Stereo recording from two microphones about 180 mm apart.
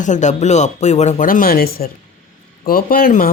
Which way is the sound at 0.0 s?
40° left (ahead or behind).